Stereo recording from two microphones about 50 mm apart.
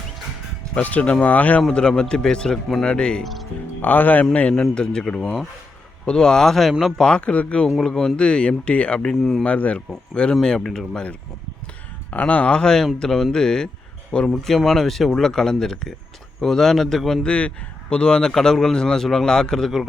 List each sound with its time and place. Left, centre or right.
0.8 s speech: left
1.7 s speech: centre
3.8 s speech: left
4.4 s speech: left; by 6.7 s centre
7.0 s speech: left
7.8 s speech: centre
8.1 s speech: centre
9.0 s speech: centre
9.4 s speech: left
10.4 s speech: centre
12.1 s speech: left
14.8 s speech: centre
17.2 s speech: left
17.8 s speech: centre